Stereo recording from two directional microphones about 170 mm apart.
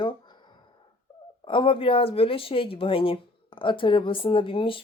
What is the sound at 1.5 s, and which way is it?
Speech, 30° left (ahead or behind).